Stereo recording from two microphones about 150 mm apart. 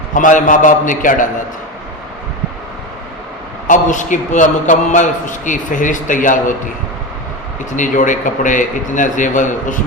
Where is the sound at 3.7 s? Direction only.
55° left (ahead or behind).